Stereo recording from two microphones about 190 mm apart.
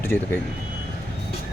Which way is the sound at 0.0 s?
10° left (ahead or behind).